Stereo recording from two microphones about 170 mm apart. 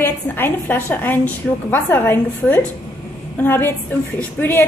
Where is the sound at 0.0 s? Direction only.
10° left (ahead or behind).